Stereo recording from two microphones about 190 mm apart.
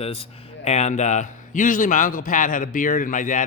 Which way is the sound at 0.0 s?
30° left (ahead or behind).